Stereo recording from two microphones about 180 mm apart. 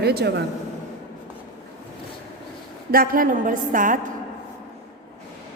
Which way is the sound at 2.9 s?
50° right (ahead or behind).